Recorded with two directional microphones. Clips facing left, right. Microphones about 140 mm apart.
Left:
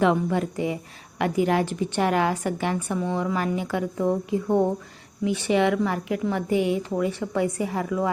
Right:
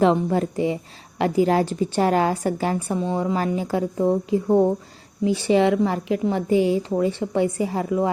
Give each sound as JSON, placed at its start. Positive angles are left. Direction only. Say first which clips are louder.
{"t": 0.0, "sound": "a woman's voice", "louder": "right 3 dB", "side_deg": -35}